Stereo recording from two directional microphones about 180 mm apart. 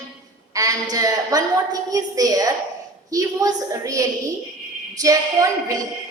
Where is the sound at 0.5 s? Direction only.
20° right (ahead or behind).